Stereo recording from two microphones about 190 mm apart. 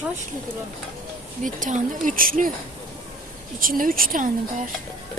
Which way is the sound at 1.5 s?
45° right (ahead or behind).